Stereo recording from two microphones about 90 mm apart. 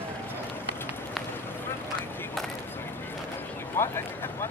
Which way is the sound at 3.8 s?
25° left (ahead or behind).